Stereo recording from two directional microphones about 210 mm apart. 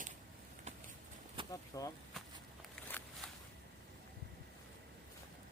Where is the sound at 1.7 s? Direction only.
15° left (ahead or behind).